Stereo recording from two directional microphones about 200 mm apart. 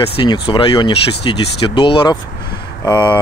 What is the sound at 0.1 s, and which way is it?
Speech, 25° left (ahead or behind).